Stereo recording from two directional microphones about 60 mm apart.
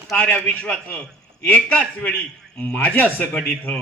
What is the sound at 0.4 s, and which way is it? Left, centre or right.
A man's voice, left.